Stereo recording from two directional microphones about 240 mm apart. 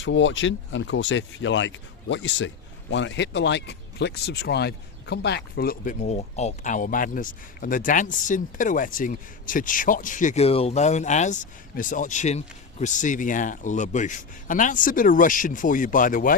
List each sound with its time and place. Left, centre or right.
0.0 s speech: left